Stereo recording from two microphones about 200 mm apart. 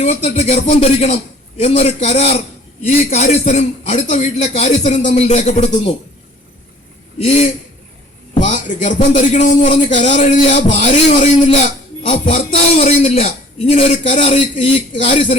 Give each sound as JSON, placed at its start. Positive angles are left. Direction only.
{"t": 0.0, "sound": "speech", "side_deg": 35}
{"t": 8.4, "sound": "speech", "side_deg": 40}
{"t": 12.0, "sound": "music", "side_deg": 30}
{"t": 12.7, "sound": "speech", "side_deg": 30}